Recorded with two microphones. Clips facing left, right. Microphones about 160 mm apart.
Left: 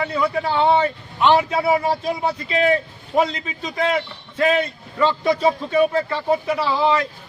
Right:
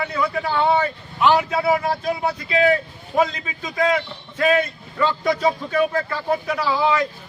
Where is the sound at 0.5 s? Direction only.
30° left (ahead or behind).